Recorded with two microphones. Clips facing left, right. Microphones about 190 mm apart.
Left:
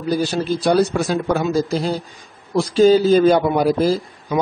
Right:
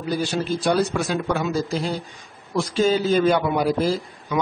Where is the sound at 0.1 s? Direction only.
35° left (ahead or behind).